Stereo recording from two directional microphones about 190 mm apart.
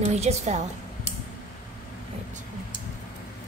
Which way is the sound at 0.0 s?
35° right (ahead or behind).